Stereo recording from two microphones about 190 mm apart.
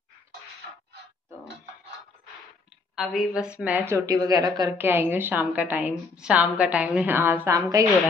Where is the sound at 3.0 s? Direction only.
Centre (ahead or behind).